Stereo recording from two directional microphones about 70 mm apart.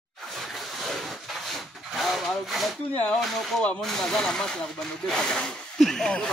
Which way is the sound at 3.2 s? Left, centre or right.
Centre.